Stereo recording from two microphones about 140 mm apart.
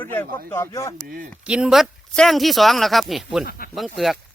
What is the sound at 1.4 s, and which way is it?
Speech, 5° right (ahead or behind).